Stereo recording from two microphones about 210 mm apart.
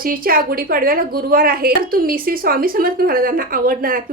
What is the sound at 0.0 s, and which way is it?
A woman's voice, 45° right (ahead or behind).